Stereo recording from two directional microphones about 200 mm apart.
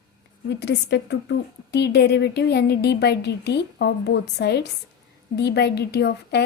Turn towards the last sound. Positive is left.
turn(degrees=55)  # may be behind; listen again after turning